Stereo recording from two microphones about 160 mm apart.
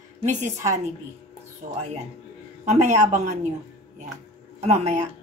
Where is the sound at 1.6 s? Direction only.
40° right (ahead or behind).